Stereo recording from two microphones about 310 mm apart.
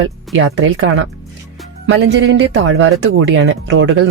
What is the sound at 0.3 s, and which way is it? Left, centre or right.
Speech, right.